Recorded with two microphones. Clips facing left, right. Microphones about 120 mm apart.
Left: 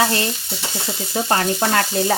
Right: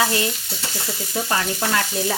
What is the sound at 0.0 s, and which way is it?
Frying, 35° left (ahead or behind).